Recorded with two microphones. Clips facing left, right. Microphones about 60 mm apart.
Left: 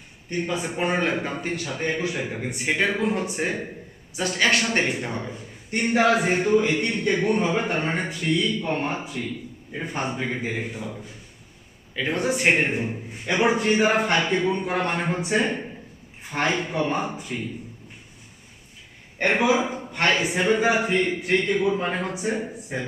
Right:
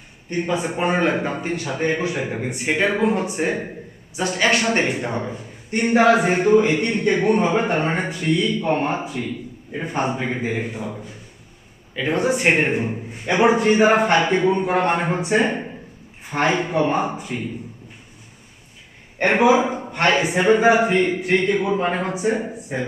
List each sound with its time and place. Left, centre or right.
0.3 s a man's voice: centre
3.0 s a man's voice: centre
6.0 s a man's voice: centre
19.4 s a man's voice: right